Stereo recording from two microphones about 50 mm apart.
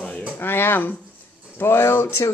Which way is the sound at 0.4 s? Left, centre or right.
Left.